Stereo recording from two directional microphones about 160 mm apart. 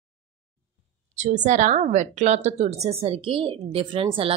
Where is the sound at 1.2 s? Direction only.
50° right (ahead or behind).